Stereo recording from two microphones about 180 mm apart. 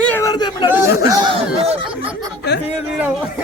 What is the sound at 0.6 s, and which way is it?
Speech, 10° right (ahead or behind).